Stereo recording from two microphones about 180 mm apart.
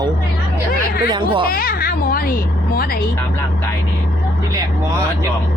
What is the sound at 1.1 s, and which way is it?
Speech, 30° right (ahead or behind).